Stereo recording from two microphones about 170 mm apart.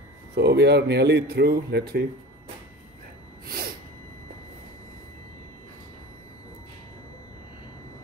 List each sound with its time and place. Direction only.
0.4 s speech: 75° right (ahead or behind)
3.4 s sneeze: 60° right (ahead or behind)